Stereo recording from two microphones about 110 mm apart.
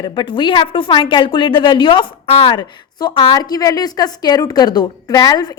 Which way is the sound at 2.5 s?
40° left (ahead or behind).